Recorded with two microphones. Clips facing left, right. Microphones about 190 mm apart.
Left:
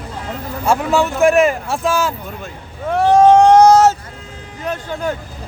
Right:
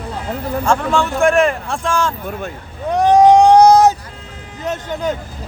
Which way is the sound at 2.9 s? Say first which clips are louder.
Even; 15° right (ahead or behind).